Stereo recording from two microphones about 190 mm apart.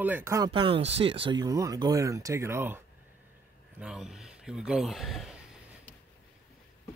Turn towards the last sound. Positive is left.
turn(degrees=0)  # may be behind; listen again after turning